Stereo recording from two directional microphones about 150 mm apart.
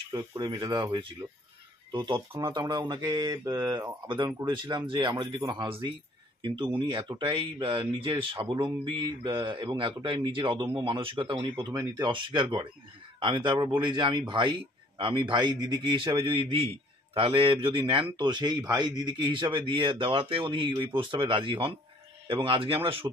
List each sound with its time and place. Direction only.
0.1 s a man's voice: 30° right (ahead or behind)
5.1 s speech: 20° right (ahead or behind)
5.5 s a man's voice: 35° right (ahead or behind)